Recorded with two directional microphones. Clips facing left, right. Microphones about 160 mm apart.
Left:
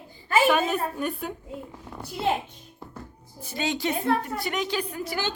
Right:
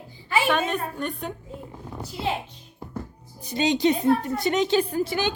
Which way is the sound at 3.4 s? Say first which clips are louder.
Right 6 dB; 20° right (ahead or behind).